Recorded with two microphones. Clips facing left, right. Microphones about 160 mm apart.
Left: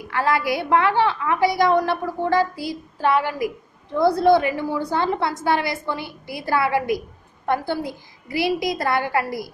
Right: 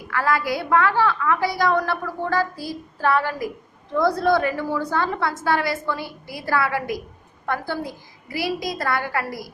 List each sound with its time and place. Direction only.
0.1 s a woman's voice: 25° left (ahead or behind)